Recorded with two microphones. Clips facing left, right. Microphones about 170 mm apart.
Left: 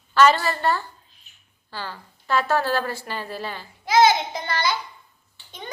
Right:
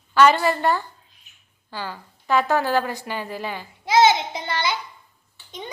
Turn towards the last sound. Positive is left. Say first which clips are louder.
# even
turn(degrees=-25)  # may be behind; listen again after turning